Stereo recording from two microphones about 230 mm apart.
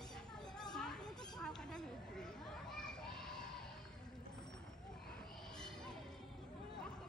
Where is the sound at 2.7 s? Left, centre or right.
Centre.